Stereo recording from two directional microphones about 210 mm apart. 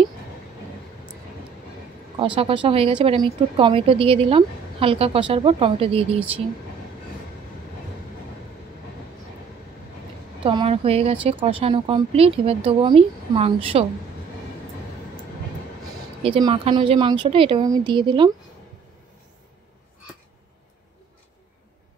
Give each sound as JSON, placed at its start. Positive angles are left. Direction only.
{"t": 2.1, "sound": "speech", "side_deg": -25}
{"t": 10.4, "sound": "speech", "side_deg": -25}
{"t": 16.2, "sound": "speech", "side_deg": -25}